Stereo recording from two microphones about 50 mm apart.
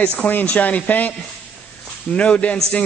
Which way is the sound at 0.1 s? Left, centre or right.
Left.